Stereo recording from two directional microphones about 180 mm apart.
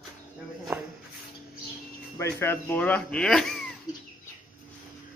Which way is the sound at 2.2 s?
15° left (ahead or behind).